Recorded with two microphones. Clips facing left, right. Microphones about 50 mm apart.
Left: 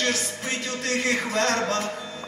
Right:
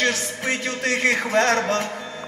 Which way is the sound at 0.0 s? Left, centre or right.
Right.